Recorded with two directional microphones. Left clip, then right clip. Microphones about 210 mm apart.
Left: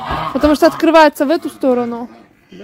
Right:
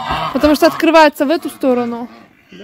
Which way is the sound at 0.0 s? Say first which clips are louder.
Right 1 dB; 20° right (ahead or behind).